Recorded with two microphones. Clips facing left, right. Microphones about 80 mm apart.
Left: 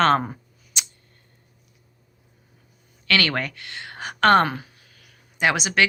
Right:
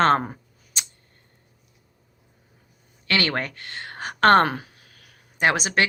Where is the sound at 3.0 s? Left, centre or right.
Right.